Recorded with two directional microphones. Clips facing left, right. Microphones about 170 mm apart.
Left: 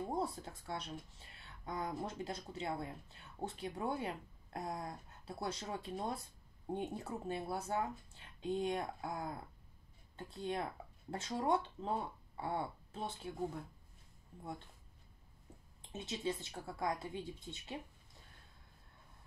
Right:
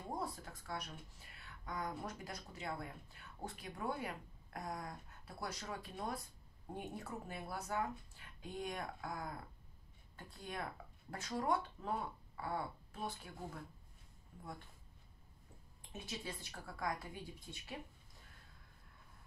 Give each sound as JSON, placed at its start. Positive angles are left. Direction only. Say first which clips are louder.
{"t": 0.1, "sound": "speech", "louder": "left 5 dB", "side_deg": 25}
{"t": 15.9, "sound": "speech", "louder": "left 7 dB", "side_deg": 25}